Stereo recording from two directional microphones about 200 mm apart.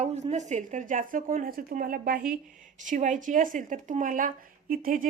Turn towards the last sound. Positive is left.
turn(degrees=-45)  # may be behind; listen again after turning